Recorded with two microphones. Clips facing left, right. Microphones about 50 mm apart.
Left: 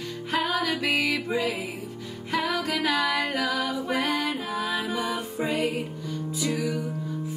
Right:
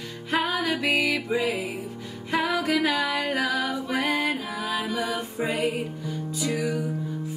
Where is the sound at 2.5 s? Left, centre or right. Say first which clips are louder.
Right 3 dB; centre.